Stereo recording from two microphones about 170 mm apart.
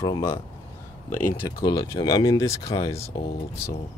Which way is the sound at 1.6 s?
20° left (ahead or behind).